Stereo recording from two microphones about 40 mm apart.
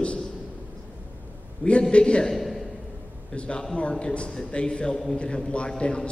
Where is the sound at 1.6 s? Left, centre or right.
Left.